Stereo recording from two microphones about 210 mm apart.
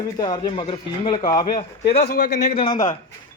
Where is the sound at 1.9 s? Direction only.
45° left (ahead or behind).